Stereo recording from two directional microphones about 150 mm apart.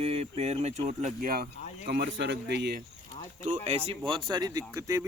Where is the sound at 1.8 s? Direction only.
90° right.